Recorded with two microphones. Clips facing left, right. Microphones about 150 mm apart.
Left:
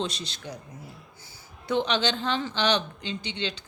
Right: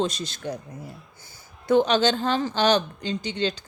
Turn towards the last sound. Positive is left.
turn(degrees=-45)  # may be behind; listen again after turning